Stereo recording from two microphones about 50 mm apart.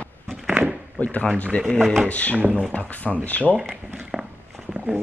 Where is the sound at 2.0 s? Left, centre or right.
Left.